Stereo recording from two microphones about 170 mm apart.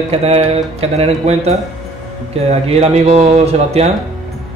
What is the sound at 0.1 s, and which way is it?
Speech, 35° right (ahead or behind).